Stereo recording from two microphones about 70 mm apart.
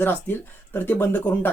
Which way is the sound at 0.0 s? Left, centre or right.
Left.